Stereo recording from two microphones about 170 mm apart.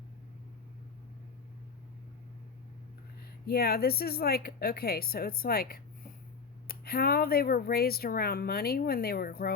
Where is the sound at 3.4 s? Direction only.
65° left (ahead or behind).